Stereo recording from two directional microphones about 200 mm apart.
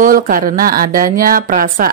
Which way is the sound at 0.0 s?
45° right (ahead or behind).